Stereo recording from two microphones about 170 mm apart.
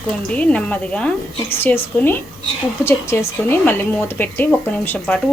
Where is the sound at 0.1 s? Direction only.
5° left (ahead or behind).